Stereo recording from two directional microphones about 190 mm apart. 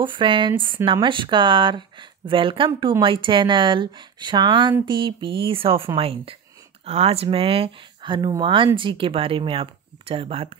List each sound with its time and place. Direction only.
0.0 s speech: 25° right (ahead or behind)